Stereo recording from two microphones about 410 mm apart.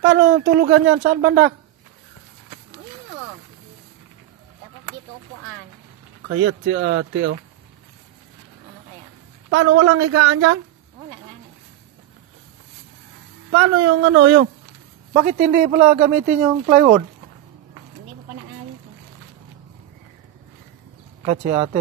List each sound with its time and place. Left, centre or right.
0.0 s speech: right
6.2 s speech: right
9.5 s a woman's voice: right
13.5 s speech: right
21.3 s speech: centre